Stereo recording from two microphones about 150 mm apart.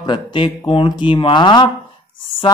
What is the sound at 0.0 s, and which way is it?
Speech, 35° left (ahead or behind).